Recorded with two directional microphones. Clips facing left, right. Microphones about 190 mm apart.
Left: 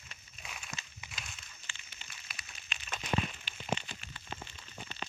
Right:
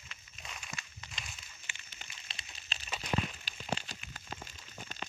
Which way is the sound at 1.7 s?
15° right (ahead or behind).